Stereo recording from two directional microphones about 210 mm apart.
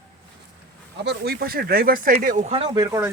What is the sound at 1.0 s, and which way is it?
Speech, 50° right (ahead or behind).